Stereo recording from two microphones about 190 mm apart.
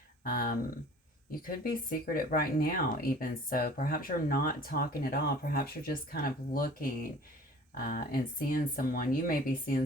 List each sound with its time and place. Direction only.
0.3 s speech: 50° left (ahead or behind)